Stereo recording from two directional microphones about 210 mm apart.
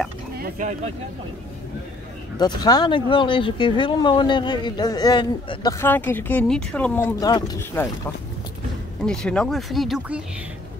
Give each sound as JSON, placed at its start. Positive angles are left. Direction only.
{"t": 0.4, "sound": "speech", "side_deg": -35}
{"t": 2.3, "sound": "speech", "side_deg": 20}
{"t": 9.0, "sound": "speech", "side_deg": 5}